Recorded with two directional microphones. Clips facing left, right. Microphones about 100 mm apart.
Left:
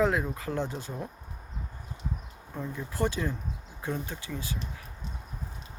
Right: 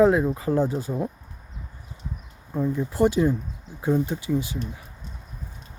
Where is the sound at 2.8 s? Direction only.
20° right (ahead or behind).